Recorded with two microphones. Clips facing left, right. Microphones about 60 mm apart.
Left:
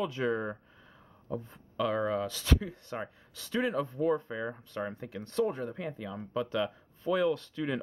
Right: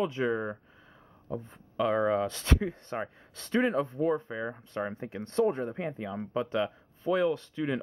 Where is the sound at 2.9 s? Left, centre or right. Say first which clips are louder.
Even; right.